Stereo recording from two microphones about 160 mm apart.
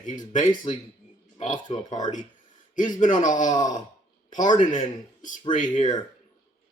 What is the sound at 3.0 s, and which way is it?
Speech, 55° left (ahead or behind).